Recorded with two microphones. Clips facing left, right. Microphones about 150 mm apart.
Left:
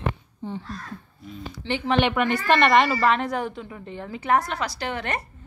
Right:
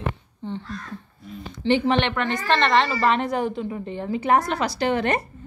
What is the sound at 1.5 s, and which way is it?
Speech, 5° left (ahead or behind).